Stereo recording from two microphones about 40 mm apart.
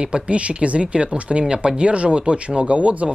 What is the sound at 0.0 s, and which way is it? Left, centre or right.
Speech, right.